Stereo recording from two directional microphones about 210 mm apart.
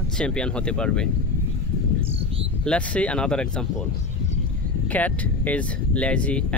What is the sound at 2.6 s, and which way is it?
Speech, 5° left (ahead or behind).